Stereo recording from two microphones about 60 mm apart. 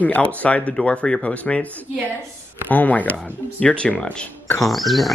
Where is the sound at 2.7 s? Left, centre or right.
Left.